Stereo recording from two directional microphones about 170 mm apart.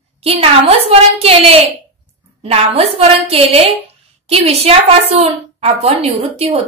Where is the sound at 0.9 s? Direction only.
35° right (ahead or behind).